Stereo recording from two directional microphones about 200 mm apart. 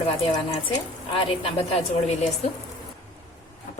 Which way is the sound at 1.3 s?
30° left (ahead or behind).